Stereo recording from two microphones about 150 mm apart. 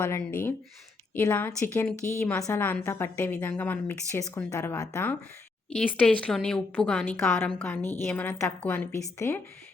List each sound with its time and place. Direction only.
0.0 s a woman's voice: 15° left (ahead or behind)
6.1 s a woman's voice: 5° left (ahead or behind)